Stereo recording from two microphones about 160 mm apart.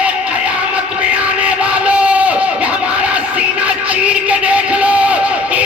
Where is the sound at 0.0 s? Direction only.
5° right (ahead or behind).